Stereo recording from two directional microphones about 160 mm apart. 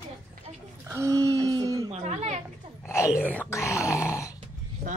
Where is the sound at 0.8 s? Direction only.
15° right (ahead or behind).